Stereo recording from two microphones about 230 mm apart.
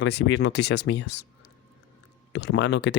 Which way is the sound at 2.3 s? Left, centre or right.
Left.